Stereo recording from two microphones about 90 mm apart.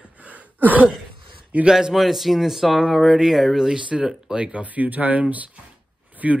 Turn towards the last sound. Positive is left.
turn(degrees=-15)  # may be behind; listen again after turning